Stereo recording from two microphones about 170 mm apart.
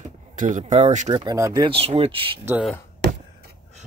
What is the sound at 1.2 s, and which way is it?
Speech, 20° right (ahead or behind).